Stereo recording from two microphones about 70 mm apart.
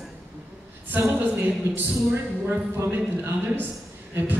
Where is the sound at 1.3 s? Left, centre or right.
Right.